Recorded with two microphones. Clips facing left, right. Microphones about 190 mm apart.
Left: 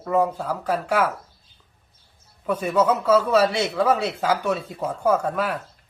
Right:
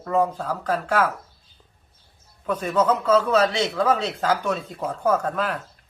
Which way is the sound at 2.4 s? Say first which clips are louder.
Left 1 dB; 10° left (ahead or behind).